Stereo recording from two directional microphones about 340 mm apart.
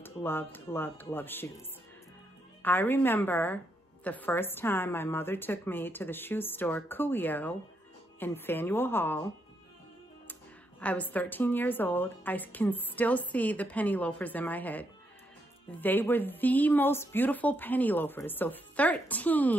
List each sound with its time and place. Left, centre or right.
0.0 s speech: centre
2.6 s a woman's voice: centre
10.8 s a woman's voice: centre